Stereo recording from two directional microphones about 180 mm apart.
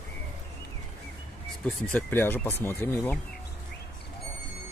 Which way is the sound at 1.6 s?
10° left (ahead or behind).